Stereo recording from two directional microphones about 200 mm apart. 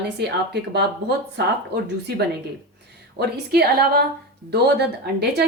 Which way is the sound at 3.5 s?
50° right (ahead or behind).